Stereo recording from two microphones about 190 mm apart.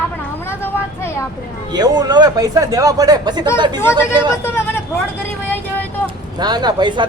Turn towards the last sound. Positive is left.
turn(degrees=-25)  # may be behind; listen again after turning